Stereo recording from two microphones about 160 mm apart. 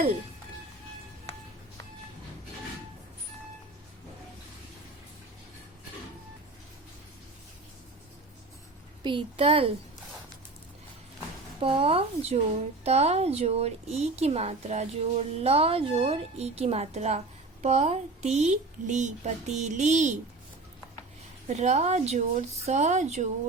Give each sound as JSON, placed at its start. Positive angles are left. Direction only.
{"t": 9.0, "sound": "a woman's voice", "side_deg": -35}
{"t": 11.6, "sound": "a woman's voice", "side_deg": -35}
{"t": 21.4, "sound": "a woman's voice", "side_deg": -45}